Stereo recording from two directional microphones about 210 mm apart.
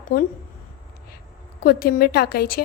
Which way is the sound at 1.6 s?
45° left (ahead or behind).